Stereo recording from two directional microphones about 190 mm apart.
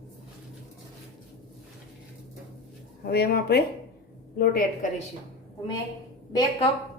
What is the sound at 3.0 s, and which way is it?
A woman's voice, 55° left (ahead or behind).